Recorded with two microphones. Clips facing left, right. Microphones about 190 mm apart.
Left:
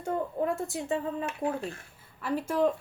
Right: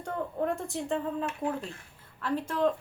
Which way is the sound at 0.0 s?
5° left (ahead or behind).